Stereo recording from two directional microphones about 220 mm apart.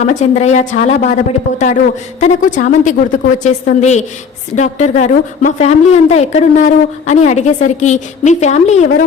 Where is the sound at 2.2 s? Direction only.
35° left (ahead or behind).